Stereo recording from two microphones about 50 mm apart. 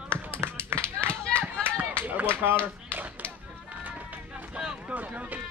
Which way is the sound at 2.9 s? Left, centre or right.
Right.